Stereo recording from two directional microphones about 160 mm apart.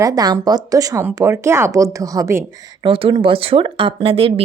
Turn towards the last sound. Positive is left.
turn(degrees=-35)  # may be behind; listen again after turning